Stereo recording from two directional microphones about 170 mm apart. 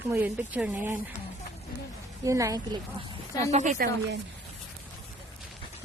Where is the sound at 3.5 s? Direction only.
45° right (ahead or behind).